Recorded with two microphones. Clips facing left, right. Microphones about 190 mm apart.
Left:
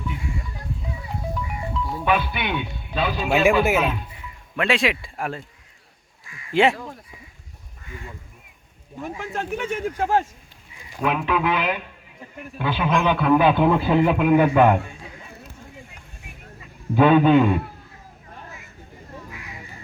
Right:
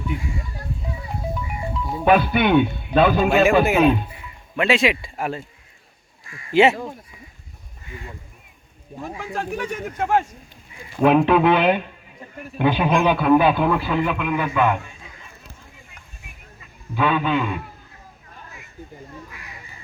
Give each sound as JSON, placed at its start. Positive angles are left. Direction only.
{"t": 1.3, "sound": "music", "side_deg": -15}
{"t": 2.0, "sound": "speech", "side_deg": -45}
{"t": 4.5, "sound": "a man's voice", "side_deg": 0}
{"t": 6.5, "sound": "speech", "side_deg": 0}
{"t": 9.3, "sound": "speech", "side_deg": 25}
{"t": 11.0, "sound": "speech", "side_deg": -40}
{"t": 12.5, "sound": "a man's voice", "side_deg": -20}
{"t": 13.6, "sound": "a man's voice", "side_deg": 20}
{"t": 16.9, "sound": "a man's voice", "side_deg": 45}